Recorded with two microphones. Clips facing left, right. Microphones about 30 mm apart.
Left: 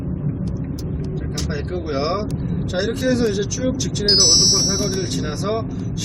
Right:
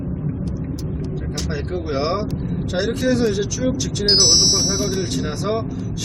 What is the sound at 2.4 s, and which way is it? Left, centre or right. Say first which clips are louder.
Speech: even; centre.